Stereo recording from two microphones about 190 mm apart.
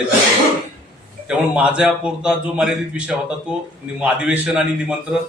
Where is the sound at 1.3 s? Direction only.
5° right (ahead or behind).